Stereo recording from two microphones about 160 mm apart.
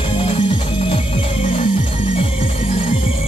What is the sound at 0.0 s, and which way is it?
Music, 30° left (ahead or behind).